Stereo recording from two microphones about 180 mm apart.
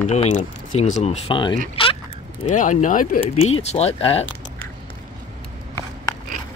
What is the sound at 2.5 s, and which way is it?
Speech, 45° left (ahead or behind).